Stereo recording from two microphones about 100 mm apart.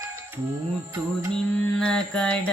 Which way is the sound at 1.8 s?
10° left (ahead or behind).